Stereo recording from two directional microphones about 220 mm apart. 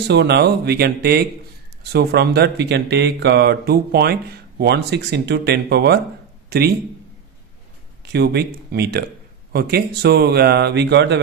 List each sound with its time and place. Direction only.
0.0 s speech: 50° right (ahead or behind)
8.1 s speech: 45° right (ahead or behind)